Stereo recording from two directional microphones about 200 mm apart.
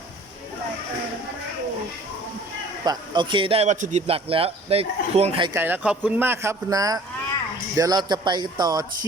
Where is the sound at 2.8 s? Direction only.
20° right (ahead or behind).